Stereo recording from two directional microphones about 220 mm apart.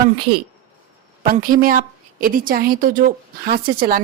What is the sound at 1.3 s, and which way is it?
A woman's voice, 40° right (ahead or behind).